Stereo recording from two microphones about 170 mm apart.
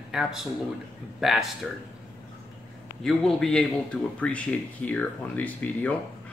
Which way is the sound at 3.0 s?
Centre (ahead or behind).